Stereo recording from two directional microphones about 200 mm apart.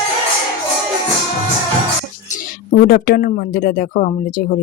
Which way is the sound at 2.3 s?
45° left (ahead or behind).